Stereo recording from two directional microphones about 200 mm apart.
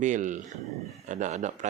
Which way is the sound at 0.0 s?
40° right (ahead or behind).